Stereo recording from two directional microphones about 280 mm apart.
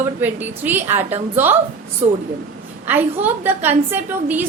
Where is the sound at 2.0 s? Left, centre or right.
Centre.